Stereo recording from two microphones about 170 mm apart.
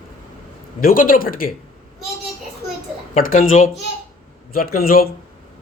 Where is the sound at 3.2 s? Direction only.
55° left (ahead or behind).